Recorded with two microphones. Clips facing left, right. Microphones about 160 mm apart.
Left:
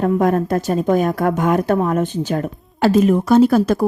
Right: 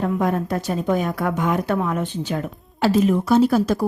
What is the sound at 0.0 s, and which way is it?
A woman's voice, 50° left (ahead or behind).